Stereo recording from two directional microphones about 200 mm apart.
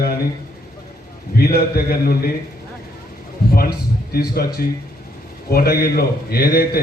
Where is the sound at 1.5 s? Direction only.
50° left (ahead or behind).